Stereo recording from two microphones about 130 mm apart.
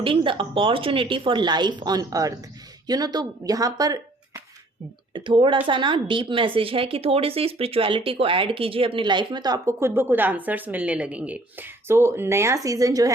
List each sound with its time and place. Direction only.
0.0 s speech: 40° right (ahead or behind)
5.1 s speech: 40° right (ahead or behind)